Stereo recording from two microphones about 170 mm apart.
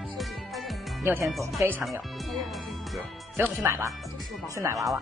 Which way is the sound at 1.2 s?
Centre (ahead or behind).